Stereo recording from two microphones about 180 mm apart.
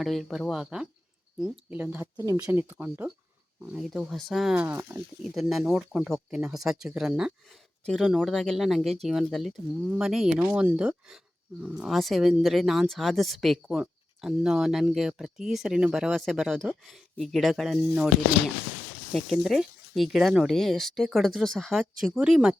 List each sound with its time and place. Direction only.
0.0 s speech: centre (ahead or behind)
5.2 s speech: centre (ahead or behind)